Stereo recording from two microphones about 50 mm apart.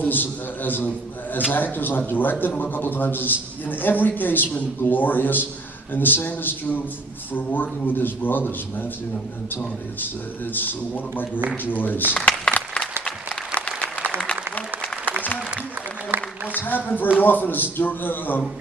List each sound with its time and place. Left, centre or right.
0.0 s a man's voice: left
10.5 s a man's voice: left
12.3 s applause: left
13.7 s a sound: right
14.2 s applause: left
16.1 s a sound: right
16.5 s a man's voice: left